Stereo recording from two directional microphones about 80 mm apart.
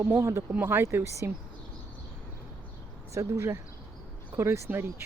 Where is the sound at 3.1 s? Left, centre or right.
Right.